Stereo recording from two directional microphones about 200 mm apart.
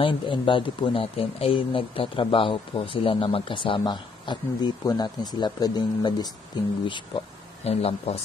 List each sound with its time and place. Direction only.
0.0 s speech: 25° left (ahead or behind)
7.6 s speech: 30° left (ahead or behind)